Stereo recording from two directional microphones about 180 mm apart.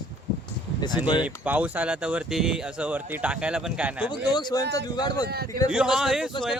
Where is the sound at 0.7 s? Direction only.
25° left (ahead or behind).